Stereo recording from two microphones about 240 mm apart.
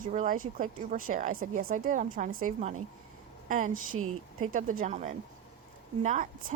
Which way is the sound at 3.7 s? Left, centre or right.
Right.